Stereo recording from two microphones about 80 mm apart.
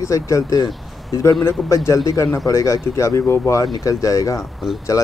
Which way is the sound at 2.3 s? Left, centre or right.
Left.